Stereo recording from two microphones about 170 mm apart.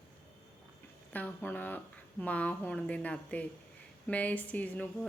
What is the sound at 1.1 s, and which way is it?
Speech, 10° left (ahead or behind).